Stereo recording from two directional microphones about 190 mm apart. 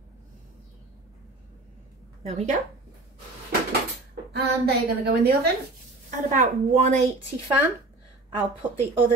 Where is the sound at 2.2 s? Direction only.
35° right (ahead or behind).